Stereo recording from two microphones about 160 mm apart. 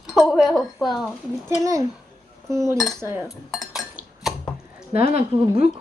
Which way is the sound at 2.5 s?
20° right (ahead or behind).